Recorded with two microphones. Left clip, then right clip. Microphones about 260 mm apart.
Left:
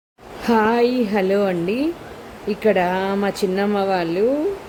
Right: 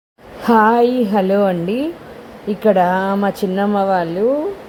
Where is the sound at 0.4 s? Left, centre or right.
Centre.